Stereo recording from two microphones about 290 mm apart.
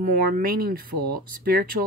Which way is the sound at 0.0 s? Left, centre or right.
Right.